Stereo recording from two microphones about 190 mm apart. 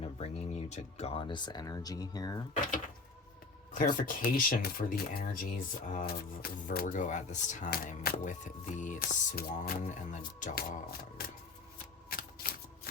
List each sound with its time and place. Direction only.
0.0 s speech: 30° left (ahead or behind)
3.8 s speech: 45° left (ahead or behind)
12.1 s shuffling cards: 50° left (ahead or behind)